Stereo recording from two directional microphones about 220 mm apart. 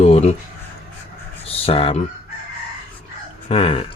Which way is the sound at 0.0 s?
30° left (ahead or behind).